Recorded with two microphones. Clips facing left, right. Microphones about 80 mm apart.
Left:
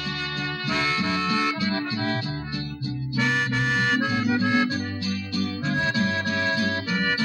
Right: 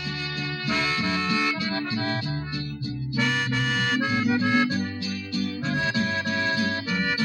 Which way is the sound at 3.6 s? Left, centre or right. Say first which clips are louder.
Left 2 dB; left.